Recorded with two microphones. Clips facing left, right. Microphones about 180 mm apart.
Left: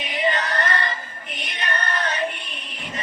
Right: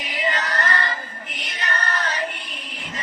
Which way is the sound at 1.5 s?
25° left (ahead or behind).